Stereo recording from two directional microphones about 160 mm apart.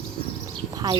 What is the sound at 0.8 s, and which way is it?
Speech, 25° right (ahead or behind).